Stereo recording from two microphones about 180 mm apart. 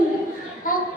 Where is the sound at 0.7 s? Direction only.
50° left (ahead or behind).